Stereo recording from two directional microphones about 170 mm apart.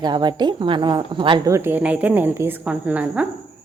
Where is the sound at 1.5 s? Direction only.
15° right (ahead or behind).